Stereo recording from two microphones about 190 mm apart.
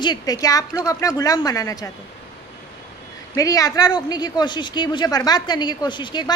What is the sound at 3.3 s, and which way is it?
Speech, 20° left (ahead or behind).